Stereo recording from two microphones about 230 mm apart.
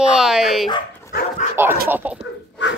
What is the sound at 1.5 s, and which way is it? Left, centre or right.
Speech, centre.